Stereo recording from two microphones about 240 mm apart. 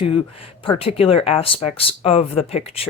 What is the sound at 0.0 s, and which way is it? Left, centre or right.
Speech, left.